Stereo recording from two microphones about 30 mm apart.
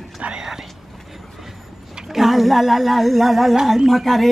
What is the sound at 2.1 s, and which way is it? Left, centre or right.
Humming, centre.